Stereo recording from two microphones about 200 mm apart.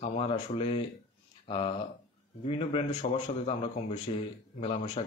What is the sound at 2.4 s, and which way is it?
A man's voice, 30° left (ahead or behind).